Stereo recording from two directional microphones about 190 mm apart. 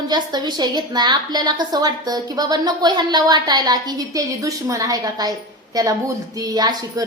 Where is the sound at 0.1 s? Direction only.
20° right (ahead or behind).